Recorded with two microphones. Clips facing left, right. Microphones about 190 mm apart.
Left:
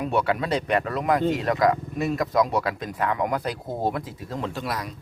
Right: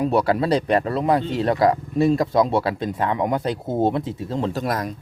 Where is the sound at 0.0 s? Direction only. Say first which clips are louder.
Right 5 dB; 35° right (ahead or behind).